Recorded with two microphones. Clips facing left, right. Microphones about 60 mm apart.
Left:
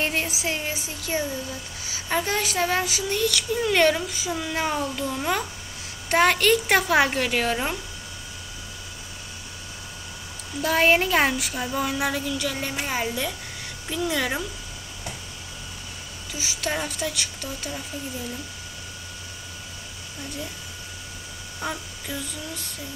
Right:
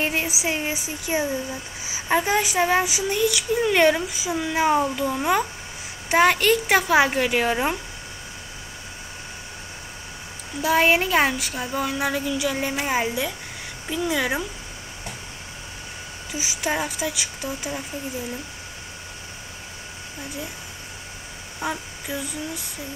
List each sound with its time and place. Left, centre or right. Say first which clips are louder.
0.0 s speech: right 2 dB; centre
10.6 s speech: right 1 dB; centre
16.3 s speech: right 3 dB; centre
21.5 s speech: right 3 dB; centre